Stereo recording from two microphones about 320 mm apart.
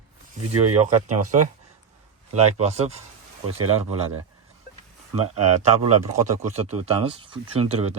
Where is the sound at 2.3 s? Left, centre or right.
Centre.